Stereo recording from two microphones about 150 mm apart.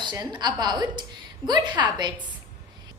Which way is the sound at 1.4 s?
30° right (ahead or behind).